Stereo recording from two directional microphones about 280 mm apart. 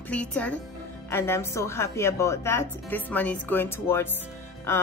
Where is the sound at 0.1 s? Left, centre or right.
Centre.